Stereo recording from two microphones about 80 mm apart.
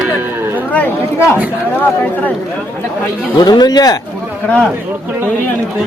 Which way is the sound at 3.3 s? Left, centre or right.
Left.